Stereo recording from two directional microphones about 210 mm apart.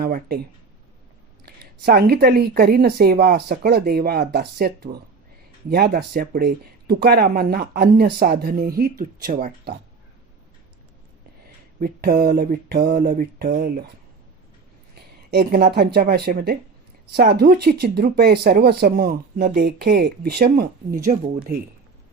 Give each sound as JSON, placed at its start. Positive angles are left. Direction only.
{"t": 0.0, "sound": "speech", "side_deg": -45}
{"t": 1.5, "sound": "speech", "side_deg": -45}
{"t": 11.8, "sound": "speech", "side_deg": -45}
{"t": 14.9, "sound": "speech", "side_deg": -50}